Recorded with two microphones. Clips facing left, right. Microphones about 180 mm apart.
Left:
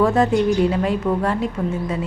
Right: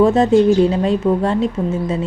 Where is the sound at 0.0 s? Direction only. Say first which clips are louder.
Right 5 dB; 25° right (ahead or behind).